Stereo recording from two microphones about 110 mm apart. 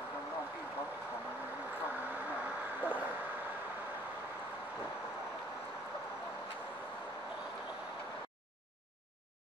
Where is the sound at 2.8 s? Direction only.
15° right (ahead or behind).